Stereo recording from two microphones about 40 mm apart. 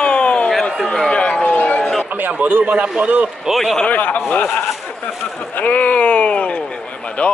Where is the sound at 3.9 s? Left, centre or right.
Left.